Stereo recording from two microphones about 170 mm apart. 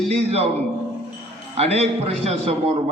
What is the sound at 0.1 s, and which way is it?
Speech, 35° right (ahead or behind).